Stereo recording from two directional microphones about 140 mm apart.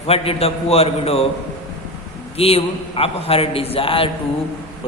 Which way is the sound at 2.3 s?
45° left (ahead or behind).